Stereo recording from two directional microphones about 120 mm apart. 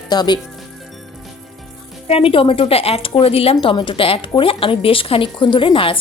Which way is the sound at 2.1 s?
50° left (ahead or behind).